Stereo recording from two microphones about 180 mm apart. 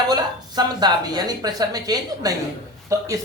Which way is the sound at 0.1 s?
20° right (ahead or behind).